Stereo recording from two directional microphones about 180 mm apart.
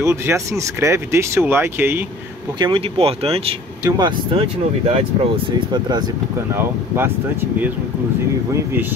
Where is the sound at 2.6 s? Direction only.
30° right (ahead or behind).